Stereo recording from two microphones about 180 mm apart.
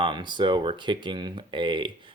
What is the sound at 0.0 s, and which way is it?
Speech, 25° right (ahead or behind).